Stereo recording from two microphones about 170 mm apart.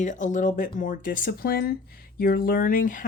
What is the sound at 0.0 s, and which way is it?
A woman's voice, 45° left (ahead or behind).